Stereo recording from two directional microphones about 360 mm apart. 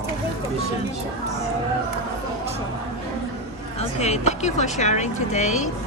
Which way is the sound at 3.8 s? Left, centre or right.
Centre.